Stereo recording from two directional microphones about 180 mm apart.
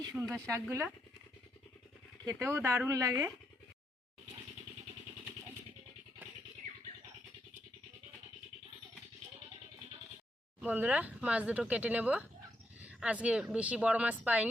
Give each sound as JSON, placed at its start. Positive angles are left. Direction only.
{"t": 0.1, "sound": "speech", "side_deg": 0}
{"t": 0.3, "sound": "speech", "side_deg": -15}
{"t": 2.2, "sound": "speech", "side_deg": -15}
{"t": 10.6, "sound": "speech", "side_deg": -10}